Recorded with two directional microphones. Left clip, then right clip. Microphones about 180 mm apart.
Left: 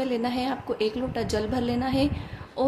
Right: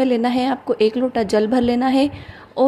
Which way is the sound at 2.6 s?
40° right (ahead or behind).